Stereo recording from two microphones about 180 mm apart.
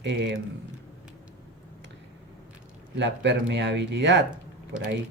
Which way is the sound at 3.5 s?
75° right (ahead or behind).